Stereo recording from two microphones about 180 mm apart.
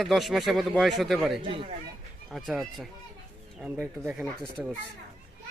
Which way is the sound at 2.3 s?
Centre (ahead or behind).